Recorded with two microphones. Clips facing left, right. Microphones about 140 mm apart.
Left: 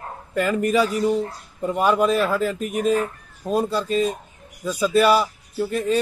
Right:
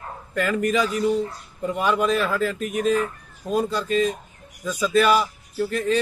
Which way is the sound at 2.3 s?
10° left (ahead or behind).